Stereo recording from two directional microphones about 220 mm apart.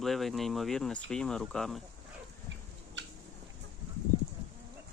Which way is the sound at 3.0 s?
55° right (ahead or behind).